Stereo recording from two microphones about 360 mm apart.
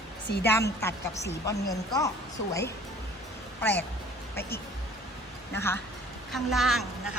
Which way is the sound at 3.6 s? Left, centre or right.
Centre.